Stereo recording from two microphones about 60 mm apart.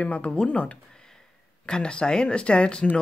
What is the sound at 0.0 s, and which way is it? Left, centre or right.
Speech, centre.